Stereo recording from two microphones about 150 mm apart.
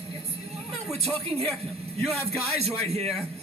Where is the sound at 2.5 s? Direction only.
45° right (ahead or behind).